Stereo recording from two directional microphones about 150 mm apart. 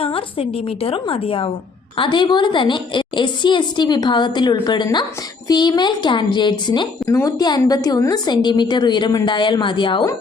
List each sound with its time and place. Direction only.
0.0 s a woman's voice: 40° left (ahead or behind)